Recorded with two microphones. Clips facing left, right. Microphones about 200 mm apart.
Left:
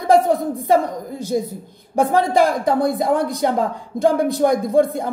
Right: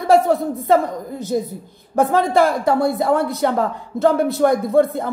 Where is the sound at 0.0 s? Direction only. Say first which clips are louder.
Even; 15° left (ahead or behind).